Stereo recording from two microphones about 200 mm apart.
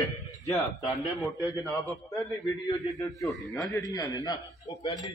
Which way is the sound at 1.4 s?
15° left (ahead or behind).